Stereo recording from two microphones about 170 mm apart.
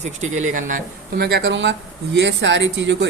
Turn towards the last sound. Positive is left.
turn(degrees=-90)